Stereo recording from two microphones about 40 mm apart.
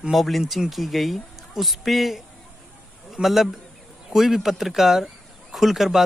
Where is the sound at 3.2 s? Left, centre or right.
Centre.